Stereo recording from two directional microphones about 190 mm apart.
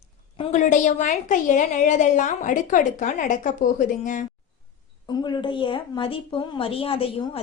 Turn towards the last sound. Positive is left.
turn(degrees=30)  # may be behind; listen again after turning